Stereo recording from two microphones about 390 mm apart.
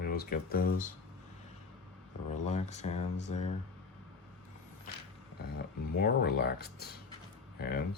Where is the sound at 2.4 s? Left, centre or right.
Centre.